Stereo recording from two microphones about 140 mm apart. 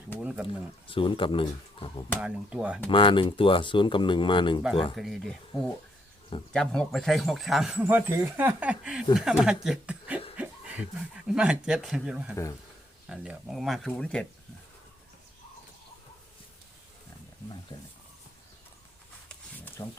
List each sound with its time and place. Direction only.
0.2 s speech: 5° right (ahead or behind)
0.4 s speech: 40° left (ahead or behind)
2.2 s speech: 5° right (ahead or behind)
2.9 s speech: 40° left (ahead or behind)
4.9 s speech: centre (ahead or behind)
6.5 s speech: 5° left (ahead or behind)
9.6 s chuckle: 10° right (ahead or behind)
10.3 s snicker: 10° right (ahead or behind)
11.3 s speech: 5° right (ahead or behind)
17.7 s speech: 30° left (ahead or behind)
19.5 s a sound: 15° left (ahead or behind)